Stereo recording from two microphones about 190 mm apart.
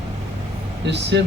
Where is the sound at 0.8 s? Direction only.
65° right (ahead or behind).